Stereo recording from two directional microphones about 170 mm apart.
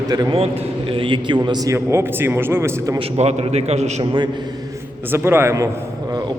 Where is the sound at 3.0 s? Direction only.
35° right (ahead or behind).